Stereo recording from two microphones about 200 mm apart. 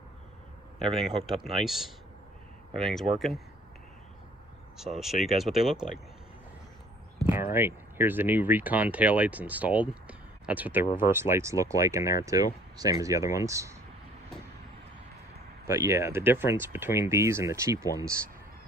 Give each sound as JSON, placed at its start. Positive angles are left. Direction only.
{"t": 0.8, "sound": "speech", "side_deg": 0}
{"t": 4.8, "sound": "speech", "side_deg": 0}
{"t": 7.3, "sound": "speech", "side_deg": -10}
{"t": 15.6, "sound": "speech", "side_deg": -15}